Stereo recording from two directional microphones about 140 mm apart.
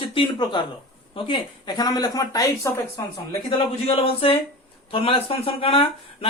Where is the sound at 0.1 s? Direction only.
35° left (ahead or behind).